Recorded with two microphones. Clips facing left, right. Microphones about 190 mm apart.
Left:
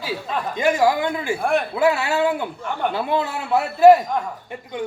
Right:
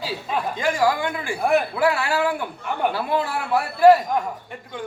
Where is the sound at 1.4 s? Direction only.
5° right (ahead or behind).